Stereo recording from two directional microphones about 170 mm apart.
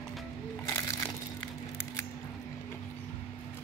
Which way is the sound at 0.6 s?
15° left (ahead or behind).